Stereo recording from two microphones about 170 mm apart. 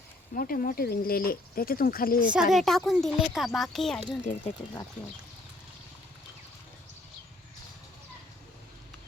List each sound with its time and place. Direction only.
0.3 s speech: 55° left (ahead or behind)
2.3 s speech: centre (ahead or behind)